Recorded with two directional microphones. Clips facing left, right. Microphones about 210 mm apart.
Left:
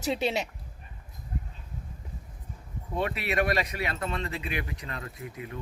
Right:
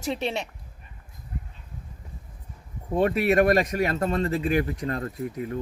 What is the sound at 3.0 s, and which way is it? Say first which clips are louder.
Speech: right 8 dB; 45° right (ahead or behind).